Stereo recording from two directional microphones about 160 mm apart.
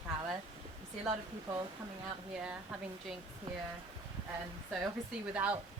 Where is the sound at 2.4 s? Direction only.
5° right (ahead or behind).